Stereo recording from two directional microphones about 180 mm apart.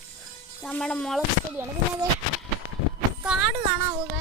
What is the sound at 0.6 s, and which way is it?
Speech, 5° left (ahead or behind).